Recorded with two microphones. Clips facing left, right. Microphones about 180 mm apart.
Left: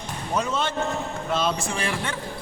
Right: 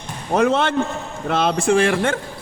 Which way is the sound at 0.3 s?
65° right (ahead or behind).